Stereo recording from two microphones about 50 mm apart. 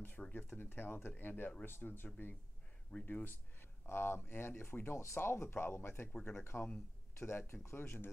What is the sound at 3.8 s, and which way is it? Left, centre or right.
Speech, left.